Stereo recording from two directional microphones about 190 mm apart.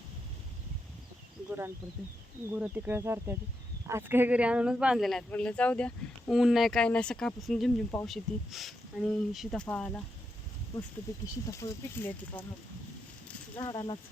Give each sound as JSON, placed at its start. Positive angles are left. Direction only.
{"t": 1.5, "sound": "speech", "side_deg": -10}
{"t": 11.5, "sound": "speech", "side_deg": 15}
{"t": 13.6, "sound": "speech", "side_deg": 20}